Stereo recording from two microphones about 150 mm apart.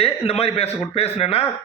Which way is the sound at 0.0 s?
40° left (ahead or behind).